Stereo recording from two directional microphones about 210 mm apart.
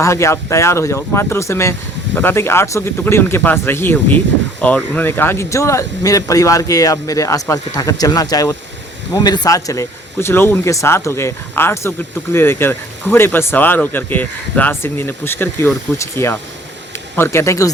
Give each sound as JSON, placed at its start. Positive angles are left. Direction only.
{"t": 0.0, "sound": "speech", "side_deg": 15}